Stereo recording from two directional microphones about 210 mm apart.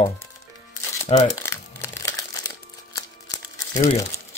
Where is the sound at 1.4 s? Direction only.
15° left (ahead or behind).